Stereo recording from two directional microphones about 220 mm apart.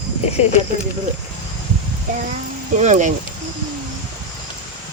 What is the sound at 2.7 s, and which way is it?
Speech, 35° right (ahead or behind).